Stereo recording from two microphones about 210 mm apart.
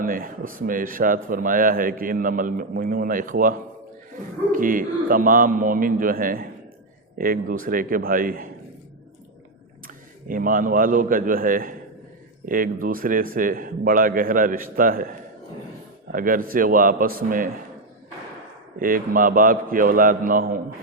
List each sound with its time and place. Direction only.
0.0 s a man's voice: 40° right (ahead or behind)
4.5 s a man's voice: 40° right (ahead or behind)
9.8 s a man's voice: 40° right (ahead or behind)
16.1 s a man's voice: 40° right (ahead or behind)
18.8 s a man's voice: 40° right (ahead or behind)